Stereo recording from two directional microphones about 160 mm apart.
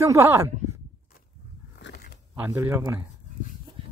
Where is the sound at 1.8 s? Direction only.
90° left.